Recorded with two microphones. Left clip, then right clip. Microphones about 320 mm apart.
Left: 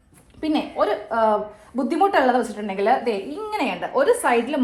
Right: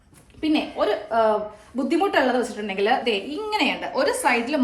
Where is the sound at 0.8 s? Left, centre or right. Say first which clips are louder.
Left 1 dB; centre.